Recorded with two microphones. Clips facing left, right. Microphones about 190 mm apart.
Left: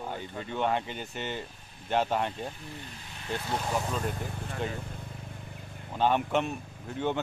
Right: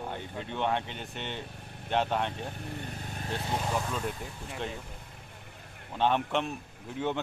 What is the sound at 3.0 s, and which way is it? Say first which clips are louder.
Vehicle: right 7 dB; 45° right (ahead or behind).